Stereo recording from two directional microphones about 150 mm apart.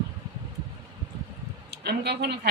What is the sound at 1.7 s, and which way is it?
Speech, 90° right.